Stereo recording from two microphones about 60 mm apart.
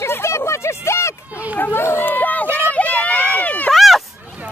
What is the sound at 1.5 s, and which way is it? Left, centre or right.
Run, left.